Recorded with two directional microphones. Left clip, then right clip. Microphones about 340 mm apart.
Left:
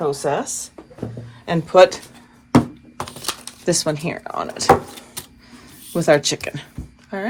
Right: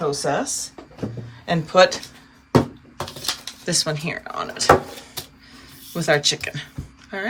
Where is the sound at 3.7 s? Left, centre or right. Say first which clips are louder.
Left 3 dB; centre.